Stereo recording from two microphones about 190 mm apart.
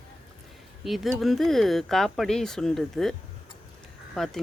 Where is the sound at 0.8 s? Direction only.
Centre (ahead or behind).